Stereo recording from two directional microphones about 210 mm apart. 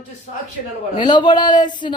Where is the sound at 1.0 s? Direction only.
20° left (ahead or behind).